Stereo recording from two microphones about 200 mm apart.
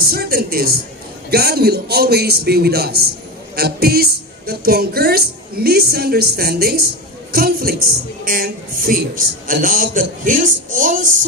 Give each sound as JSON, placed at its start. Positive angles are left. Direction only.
{"t": 0.0, "sound": "a woman's voice", "side_deg": -50}